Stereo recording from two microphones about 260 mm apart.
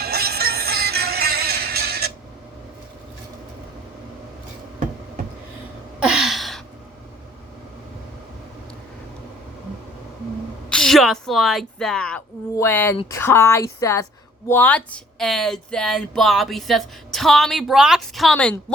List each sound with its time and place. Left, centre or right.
0.0 s music: right
6.0 s a sound: centre
10.7 s a woman's voice: centre